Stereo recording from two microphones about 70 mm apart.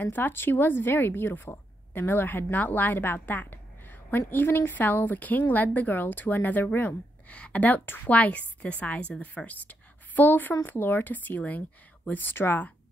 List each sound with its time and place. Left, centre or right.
0.0 s a woman's voice: left
7.2 s a woman's voice: centre